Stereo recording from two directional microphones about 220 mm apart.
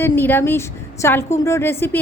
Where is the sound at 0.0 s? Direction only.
10° left (ahead or behind).